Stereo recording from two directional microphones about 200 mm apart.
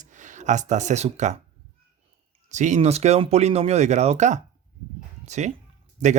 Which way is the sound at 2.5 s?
35° right (ahead or behind).